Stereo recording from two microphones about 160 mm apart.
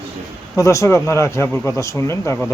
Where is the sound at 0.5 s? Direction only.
20° left (ahead or behind).